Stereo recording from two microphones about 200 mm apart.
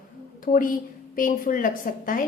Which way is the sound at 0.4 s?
45° left (ahead or behind).